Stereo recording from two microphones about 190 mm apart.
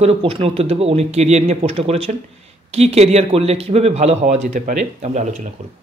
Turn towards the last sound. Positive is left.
turn(degrees=-40)  # may be behind; listen again after turning